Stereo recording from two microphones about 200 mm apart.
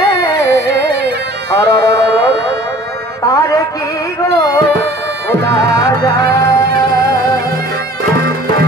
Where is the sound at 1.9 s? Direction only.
55° right (ahead or behind).